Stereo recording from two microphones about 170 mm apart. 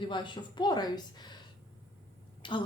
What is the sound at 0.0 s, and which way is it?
A woman's voice, 30° left (ahead or behind).